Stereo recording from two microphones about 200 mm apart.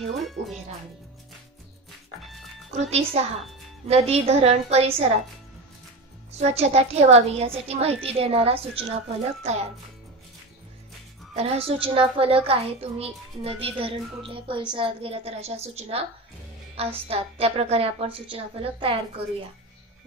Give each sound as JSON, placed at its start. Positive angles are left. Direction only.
{"t": 0.4, "sound": "a woman's voice", "side_deg": -35}
{"t": 2.7, "sound": "a woman's voice", "side_deg": -35}
{"t": 6.3, "sound": "a woman's voice", "side_deg": -30}
{"t": 11.3, "sound": "a child's voice", "side_deg": -30}